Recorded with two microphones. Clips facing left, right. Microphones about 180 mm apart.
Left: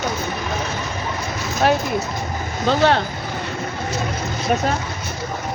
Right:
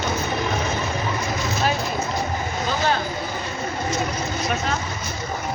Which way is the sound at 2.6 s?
70° left (ahead or behind).